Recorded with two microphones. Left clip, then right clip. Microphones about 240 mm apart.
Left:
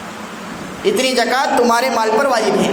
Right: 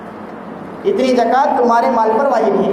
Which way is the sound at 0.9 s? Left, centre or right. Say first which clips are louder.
Right 2 dB; left.